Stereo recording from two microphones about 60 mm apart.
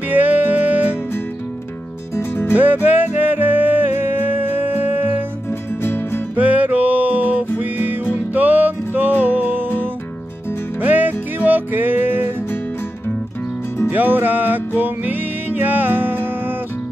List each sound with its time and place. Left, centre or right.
0.1 s music: right
2.5 s music: right
5.5 s music: left
6.3 s music: right
10.8 s music: right
13.8 s music: right